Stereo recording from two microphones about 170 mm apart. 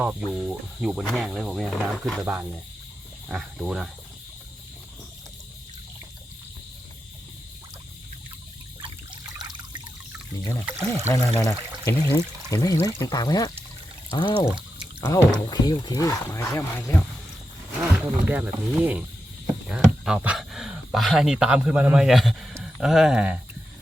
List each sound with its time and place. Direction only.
0.0 s speech: 5° right (ahead or behind)
9.4 s water: 25° right (ahead or behind)
11.1 s speech: 15° left (ahead or behind)
17.7 s speech: 10° right (ahead or behind)